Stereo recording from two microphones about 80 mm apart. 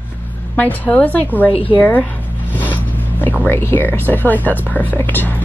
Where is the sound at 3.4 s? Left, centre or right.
Left.